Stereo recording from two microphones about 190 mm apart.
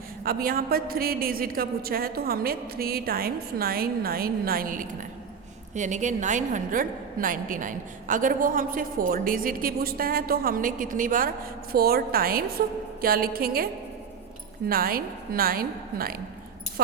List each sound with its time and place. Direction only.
0.3 s a woman's voice: 50° right (ahead or behind)
14.7 s a woman's voice: 50° right (ahead or behind)